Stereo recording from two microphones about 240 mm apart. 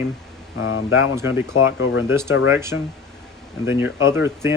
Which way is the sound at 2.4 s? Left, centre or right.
Centre.